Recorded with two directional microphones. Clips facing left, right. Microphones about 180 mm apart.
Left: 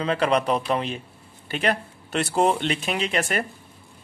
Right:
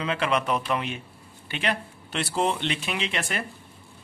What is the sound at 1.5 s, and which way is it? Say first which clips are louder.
Speech: left 4 dB; 45° left (ahead or behind).